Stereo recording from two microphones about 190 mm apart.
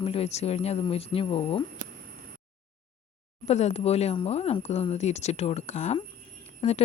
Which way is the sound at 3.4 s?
35° left (ahead or behind).